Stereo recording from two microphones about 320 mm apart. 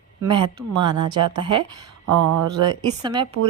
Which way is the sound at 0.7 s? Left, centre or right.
Right.